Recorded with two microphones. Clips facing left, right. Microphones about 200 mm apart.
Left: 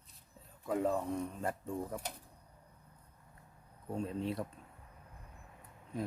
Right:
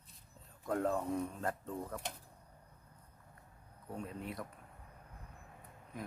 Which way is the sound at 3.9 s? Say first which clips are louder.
Left 6 dB; 25° left (ahead or behind).